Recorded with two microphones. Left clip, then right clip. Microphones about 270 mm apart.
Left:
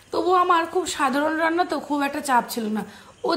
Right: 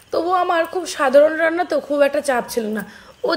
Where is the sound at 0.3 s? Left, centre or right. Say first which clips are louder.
Even; centre.